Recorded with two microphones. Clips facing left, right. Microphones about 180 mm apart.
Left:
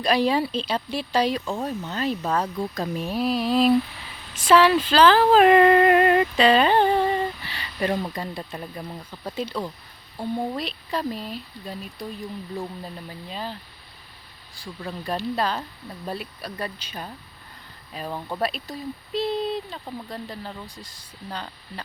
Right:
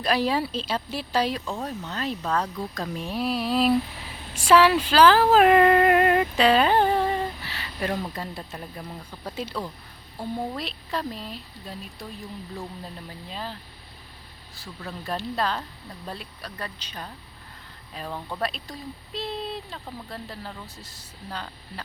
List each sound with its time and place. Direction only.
0.0 s speech: 5° right (ahead or behind)
9.3 s speech: 5° right (ahead or behind)
14.8 s speech: centre (ahead or behind)